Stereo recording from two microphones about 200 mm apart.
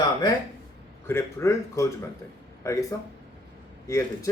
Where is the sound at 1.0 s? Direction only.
15° left (ahead or behind).